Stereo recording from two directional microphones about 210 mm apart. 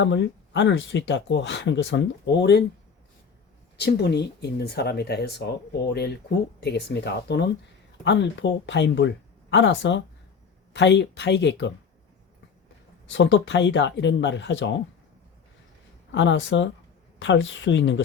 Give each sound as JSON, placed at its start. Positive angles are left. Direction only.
{"t": 0.0, "sound": "speech", "side_deg": 60}
{"t": 3.8, "sound": "speech", "side_deg": 50}
{"t": 6.6, "sound": "speech", "side_deg": 55}
{"t": 13.1, "sound": "speech", "side_deg": 60}
{"t": 16.1, "sound": "speech", "side_deg": 60}